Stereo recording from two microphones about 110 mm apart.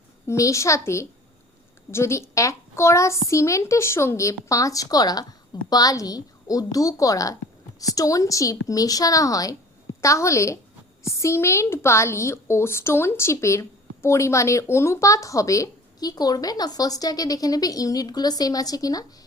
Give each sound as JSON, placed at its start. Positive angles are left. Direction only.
{"t": 0.3, "sound": "a woman's voice", "side_deg": 30}